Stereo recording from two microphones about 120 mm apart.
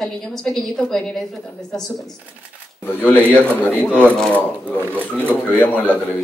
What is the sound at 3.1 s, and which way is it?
Speech, 15° left (ahead or behind).